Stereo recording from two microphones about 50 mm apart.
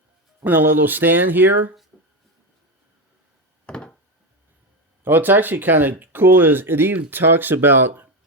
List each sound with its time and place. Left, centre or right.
0.4 s speech: right
3.7 s a sound: left
5.0 s speech: right